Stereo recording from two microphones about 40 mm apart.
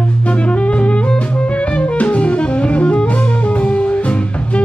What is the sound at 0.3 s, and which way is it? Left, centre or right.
Music, left.